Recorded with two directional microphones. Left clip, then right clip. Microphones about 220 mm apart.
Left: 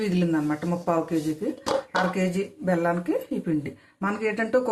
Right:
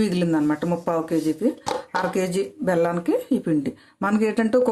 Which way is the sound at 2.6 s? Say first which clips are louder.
Right 3 dB; 45° right (ahead or behind).